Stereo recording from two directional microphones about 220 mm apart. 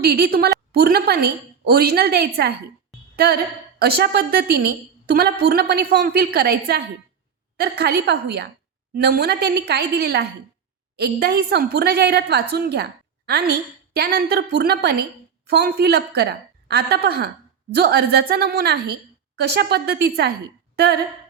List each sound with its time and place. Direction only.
0.0 s a woman's voice: 45° right (ahead or behind)